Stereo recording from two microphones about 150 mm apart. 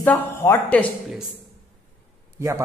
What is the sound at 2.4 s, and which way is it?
Speech, 20° right (ahead or behind).